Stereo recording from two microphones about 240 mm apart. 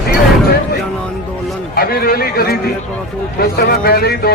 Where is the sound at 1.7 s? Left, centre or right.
Left.